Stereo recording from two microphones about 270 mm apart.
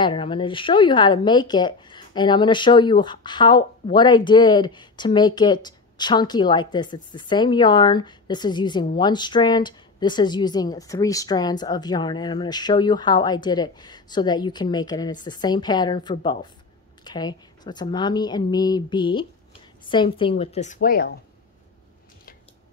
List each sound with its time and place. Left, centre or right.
0.0 s a woman's voice: centre